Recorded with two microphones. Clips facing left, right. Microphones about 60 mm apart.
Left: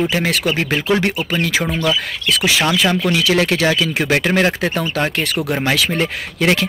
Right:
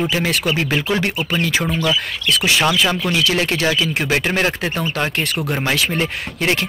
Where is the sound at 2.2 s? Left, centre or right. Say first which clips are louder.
Even; left.